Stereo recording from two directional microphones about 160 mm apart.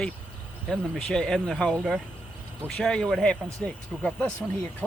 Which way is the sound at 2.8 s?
5° left (ahead or behind).